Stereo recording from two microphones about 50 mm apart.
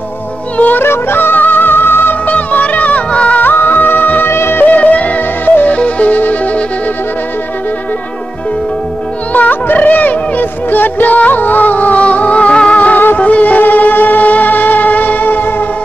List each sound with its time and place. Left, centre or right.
0.6 s music: left
0.8 s music: left
2.2 s music: left
3.3 s music: left
4.3 s music: left
4.6 s music: left
9.3 s music: left